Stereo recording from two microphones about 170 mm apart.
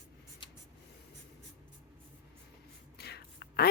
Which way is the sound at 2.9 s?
75° left (ahead or behind).